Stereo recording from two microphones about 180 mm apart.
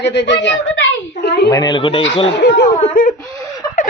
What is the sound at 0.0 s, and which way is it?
A woman's voice, 75° left (ahead or behind).